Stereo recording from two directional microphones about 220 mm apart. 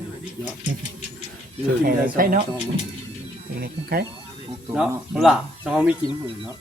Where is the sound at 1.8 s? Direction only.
40° right (ahead or behind).